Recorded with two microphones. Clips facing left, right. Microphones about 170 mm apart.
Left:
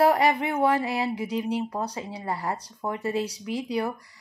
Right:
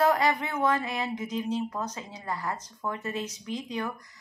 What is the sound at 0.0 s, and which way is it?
Speech, 30° left (ahead or behind).